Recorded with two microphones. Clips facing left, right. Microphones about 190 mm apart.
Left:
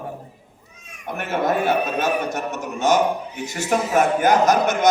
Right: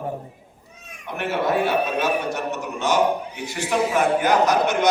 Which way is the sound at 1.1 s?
45° left (ahead or behind).